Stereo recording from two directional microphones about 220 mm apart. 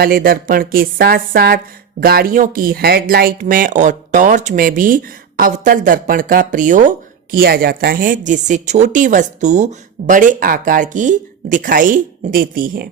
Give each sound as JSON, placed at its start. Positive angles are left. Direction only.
{"t": 0.0, "sound": "speech", "side_deg": -40}